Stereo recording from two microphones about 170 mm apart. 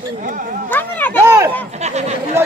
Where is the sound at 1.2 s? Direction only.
15° right (ahead or behind).